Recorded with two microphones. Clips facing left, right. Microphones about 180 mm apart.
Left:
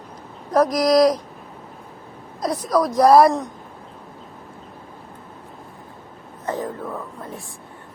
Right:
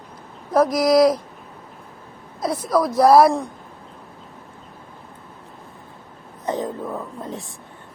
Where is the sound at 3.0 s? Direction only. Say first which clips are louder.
Even; centre (ahead or behind).